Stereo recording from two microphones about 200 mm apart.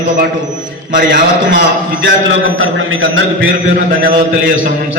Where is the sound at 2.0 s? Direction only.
70° right (ahead or behind).